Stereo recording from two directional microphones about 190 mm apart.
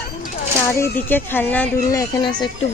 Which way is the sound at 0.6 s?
15° left (ahead or behind).